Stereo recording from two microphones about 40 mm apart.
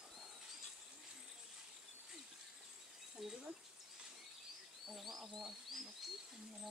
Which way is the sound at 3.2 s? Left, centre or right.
Centre.